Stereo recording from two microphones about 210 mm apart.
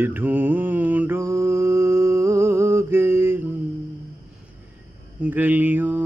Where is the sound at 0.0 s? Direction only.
10° right (ahead or behind).